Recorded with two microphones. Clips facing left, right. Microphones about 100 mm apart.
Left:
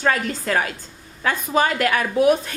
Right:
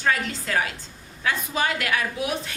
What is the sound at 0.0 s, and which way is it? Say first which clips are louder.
A woman's voice: left 4 dB; 45° left (ahead or behind).